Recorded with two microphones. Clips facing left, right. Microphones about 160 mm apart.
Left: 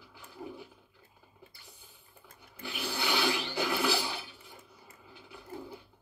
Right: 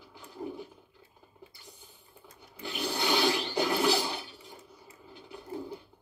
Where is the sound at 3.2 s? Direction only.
40° right (ahead or behind).